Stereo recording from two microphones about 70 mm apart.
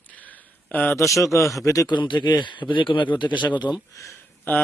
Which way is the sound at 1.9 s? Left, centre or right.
Left.